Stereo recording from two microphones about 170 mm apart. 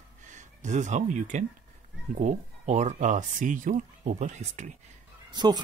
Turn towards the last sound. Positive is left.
turn(degrees=-25)  # may be behind; listen again after turning